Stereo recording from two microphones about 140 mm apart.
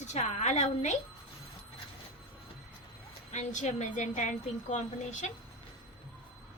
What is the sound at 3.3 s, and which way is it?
A woman's voice, 60° left (ahead or behind).